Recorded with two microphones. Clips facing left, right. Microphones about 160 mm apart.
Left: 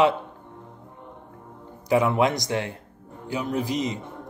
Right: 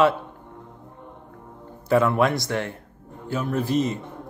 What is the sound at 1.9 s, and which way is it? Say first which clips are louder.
Speech: right 1 dB; 15° left (ahead or behind).